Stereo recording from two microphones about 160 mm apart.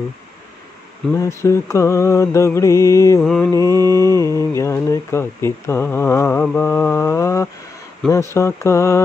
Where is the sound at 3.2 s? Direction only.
5° left (ahead or behind).